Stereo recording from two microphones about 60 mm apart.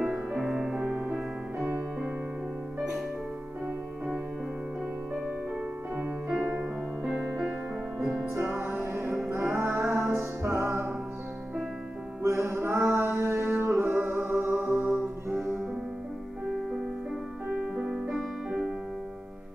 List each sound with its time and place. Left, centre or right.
0.1 s music: centre
5.9 s music: right
8.4 s music: right
12.2 s music: right
17.5 s music: right